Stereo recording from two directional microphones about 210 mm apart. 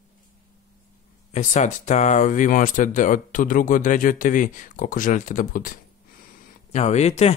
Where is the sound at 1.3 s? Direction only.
35° left (ahead or behind).